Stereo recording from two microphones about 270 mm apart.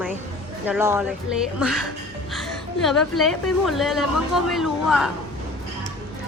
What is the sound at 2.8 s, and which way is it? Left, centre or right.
A woman's voice, centre.